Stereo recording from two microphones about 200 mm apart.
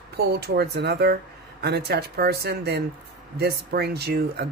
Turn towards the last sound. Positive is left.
turn(degrees=-55)  # may be behind; listen again after turning